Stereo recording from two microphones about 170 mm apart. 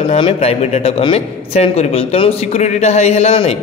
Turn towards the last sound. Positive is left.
turn(degrees=35)  # may be behind; listen again after turning